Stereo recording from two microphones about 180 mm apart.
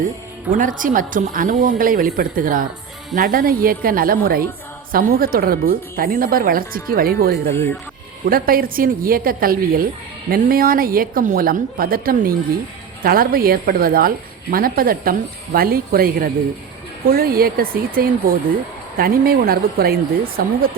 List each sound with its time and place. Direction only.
0.5 s speech: 50° right (ahead or behind)